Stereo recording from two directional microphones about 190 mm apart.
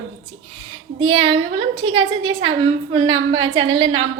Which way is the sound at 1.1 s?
30° right (ahead or behind).